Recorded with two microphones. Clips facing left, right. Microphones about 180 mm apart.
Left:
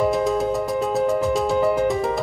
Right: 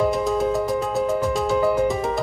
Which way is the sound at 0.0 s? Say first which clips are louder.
Left 1 dB; centre (ahead or behind).